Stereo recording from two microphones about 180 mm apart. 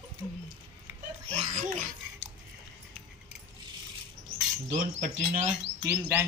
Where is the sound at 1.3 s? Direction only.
40° right (ahead or behind).